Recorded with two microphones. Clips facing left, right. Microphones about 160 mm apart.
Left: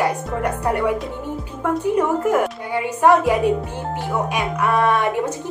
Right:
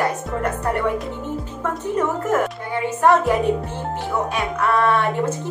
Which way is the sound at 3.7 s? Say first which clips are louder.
Left 1 dB; 15° left (ahead or behind).